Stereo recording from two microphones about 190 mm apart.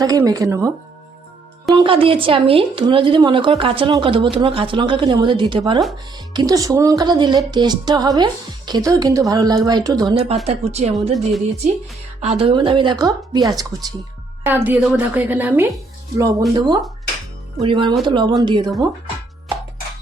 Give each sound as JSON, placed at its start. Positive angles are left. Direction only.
{"t": 0.0, "sound": "a woman's voice", "side_deg": -20}
{"t": 1.7, "sound": "speech", "side_deg": -25}
{"t": 11.1, "sound": "speech", "side_deg": 0}
{"t": 12.2, "sound": "a woman's voice", "side_deg": -35}
{"t": 16.6, "sound": "speech", "side_deg": -20}